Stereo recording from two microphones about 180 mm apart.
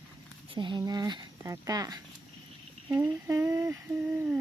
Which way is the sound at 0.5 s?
25° right (ahead or behind).